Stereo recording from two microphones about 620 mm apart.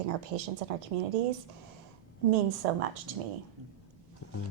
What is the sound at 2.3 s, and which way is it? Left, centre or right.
Speech, right.